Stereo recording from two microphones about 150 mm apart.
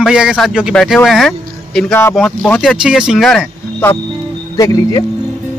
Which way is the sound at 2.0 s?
15° left (ahead or behind).